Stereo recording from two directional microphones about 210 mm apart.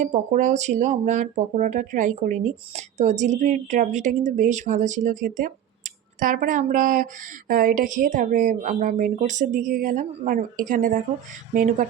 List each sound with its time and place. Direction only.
0.0 s speech: 35° right (ahead or behind)